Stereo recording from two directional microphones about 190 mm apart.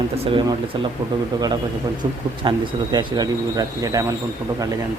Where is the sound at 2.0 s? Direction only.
25° right (ahead or behind).